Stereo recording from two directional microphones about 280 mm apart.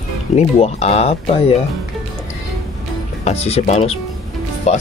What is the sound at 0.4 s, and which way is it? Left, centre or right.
Speech, left.